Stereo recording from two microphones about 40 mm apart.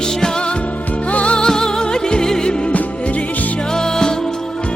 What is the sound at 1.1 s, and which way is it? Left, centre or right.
Music, left.